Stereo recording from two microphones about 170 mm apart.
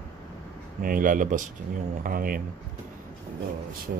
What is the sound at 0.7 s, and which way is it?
Speech, 55° right (ahead or behind).